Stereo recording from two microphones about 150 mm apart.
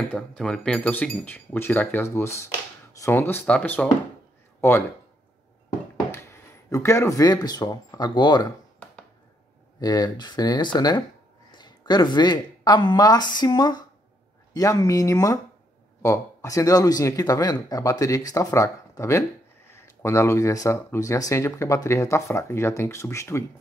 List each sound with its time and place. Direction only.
0.1 s speech: 5° left (ahead or behind)
6.1 s speech: 20° left (ahead or behind)
9.8 s speech: 25° left (ahead or behind)